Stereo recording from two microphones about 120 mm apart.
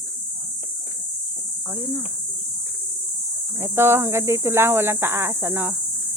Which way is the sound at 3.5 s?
20° right (ahead or behind).